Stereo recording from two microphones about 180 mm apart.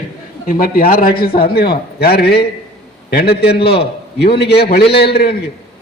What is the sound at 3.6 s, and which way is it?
Speech, 30° left (ahead or behind).